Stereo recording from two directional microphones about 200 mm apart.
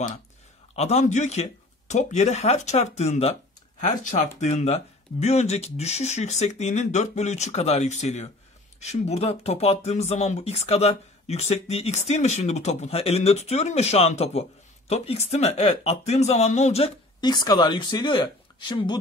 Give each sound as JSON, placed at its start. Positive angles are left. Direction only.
{"t": 0.7, "sound": "speech", "side_deg": 35}